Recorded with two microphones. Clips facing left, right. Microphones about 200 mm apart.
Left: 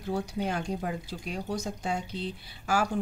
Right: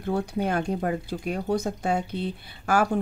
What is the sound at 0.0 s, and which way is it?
Speech, 55° right (ahead or behind).